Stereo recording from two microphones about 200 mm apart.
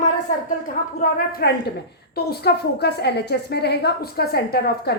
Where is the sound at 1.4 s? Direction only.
50° left (ahead or behind).